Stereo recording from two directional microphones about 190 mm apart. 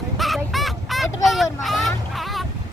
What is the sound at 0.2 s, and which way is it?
Fowl, centre (ahead or behind).